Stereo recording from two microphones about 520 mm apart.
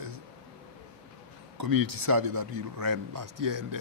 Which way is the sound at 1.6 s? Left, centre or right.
Right.